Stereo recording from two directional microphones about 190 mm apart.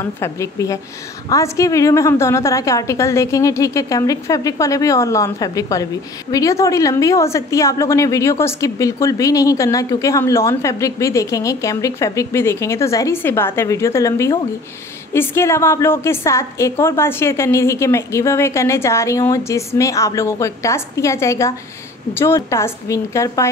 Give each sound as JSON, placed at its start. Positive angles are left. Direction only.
{"t": 0.0, "sound": "a woman's voice", "side_deg": 15}